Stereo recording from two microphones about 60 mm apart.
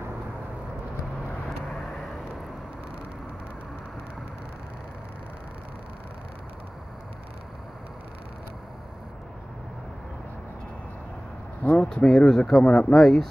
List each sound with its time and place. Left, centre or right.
1.7 s vehicle: centre
11.6 s a sound: left
11.9 s speech: centre